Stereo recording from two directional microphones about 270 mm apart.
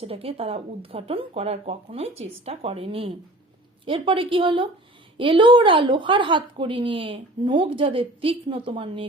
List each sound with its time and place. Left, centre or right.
0.0 s a woman's voice: right